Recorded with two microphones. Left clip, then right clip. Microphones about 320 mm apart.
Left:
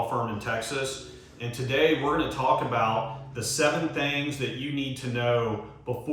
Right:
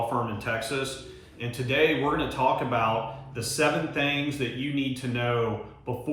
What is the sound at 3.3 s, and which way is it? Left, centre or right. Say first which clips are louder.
Speech: even; centre.